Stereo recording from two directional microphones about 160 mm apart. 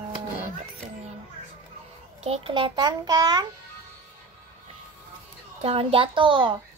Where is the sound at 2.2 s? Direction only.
35° right (ahead or behind).